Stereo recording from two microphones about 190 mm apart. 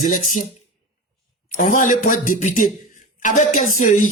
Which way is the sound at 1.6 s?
40° left (ahead or behind).